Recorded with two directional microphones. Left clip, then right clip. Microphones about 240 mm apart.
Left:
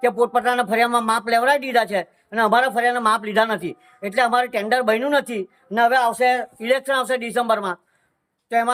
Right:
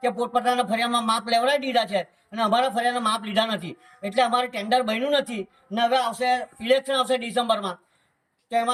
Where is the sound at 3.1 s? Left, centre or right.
Left.